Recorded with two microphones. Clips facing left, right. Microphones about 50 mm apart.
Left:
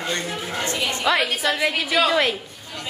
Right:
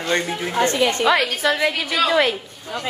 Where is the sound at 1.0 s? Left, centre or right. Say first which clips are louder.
Left 1 dB; centre.